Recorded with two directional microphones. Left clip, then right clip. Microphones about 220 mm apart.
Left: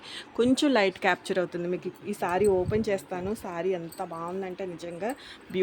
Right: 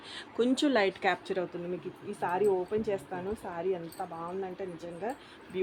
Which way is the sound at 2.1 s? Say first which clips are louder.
Left 4 dB; 55° left (ahead or behind).